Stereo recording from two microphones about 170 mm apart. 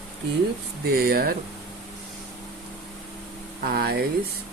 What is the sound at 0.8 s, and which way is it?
Speech, 65° right (ahead or behind).